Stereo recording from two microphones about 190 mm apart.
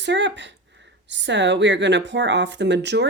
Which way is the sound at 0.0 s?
70° right (ahead or behind).